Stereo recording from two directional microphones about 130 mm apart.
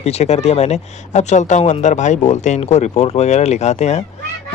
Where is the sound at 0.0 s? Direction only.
55° left (ahead or behind).